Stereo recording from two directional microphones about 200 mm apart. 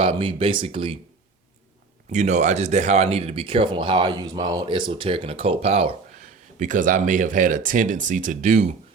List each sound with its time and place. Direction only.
0.0 s speech: 25° right (ahead or behind)
2.1 s speech: 35° right (ahead or behind)